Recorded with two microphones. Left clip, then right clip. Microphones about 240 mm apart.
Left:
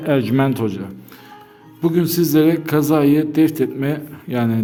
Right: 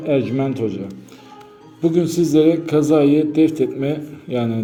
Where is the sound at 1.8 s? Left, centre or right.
Left.